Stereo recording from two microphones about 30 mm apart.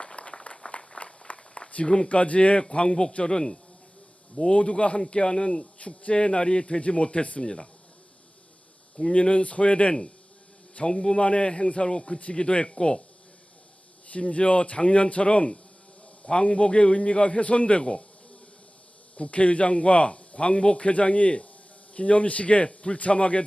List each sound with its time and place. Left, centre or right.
0.0 s a sound: left
0.7 s a sound: left
1.8 s a man's voice: left
2.6 s a man's voice: left
4.5 s a man's voice: left
5.8 s a man's voice: left
7.4 s a man's voice: left
9.1 s a man's voice: left
10.8 s a man's voice: left
11.2 s a man's voice: left
11.9 s a man's voice: left
12.3 s a man's voice: left
14.2 s a man's voice: left
19.1 s a man's voice: left